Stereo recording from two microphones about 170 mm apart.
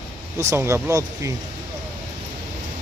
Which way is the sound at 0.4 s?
15° right (ahead or behind).